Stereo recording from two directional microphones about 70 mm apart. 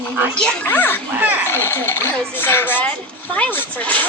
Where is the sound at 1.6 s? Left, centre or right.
Left.